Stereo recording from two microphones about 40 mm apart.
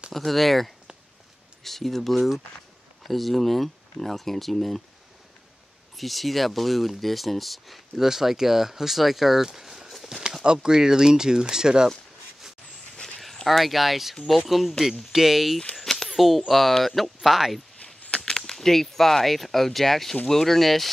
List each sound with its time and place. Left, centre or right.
0.1 s speech: centre
5.9 s speech: centre
8.1 s speech: centre
10.4 s speech: centre
13.2 s speech: centre
15.8 s a sound: centre
16.1 s speech: centre
17.8 s speech: left; by 20.9 s centre